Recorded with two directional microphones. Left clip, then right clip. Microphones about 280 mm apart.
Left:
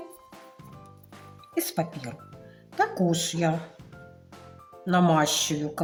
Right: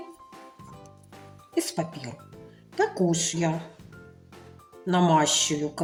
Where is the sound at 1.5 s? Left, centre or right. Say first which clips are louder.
Even; centre.